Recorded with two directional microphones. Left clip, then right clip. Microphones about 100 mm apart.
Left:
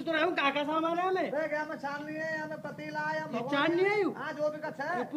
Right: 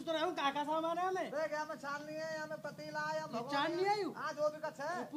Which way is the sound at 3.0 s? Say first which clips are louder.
Left 6 dB; 50° right (ahead or behind).